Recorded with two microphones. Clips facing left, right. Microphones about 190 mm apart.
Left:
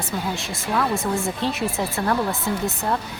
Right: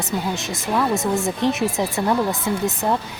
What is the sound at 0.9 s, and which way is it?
Speech, 40° right (ahead or behind).